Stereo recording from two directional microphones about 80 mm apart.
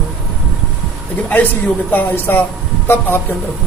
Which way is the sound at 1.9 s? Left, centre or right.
Left.